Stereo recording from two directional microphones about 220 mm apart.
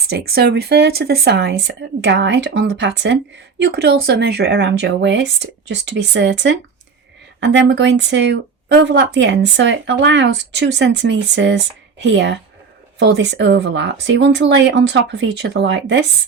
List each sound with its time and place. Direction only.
0.1 s speech: 45° right (ahead or behind)